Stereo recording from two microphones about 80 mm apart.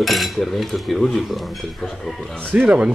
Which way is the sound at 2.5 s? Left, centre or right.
Centre.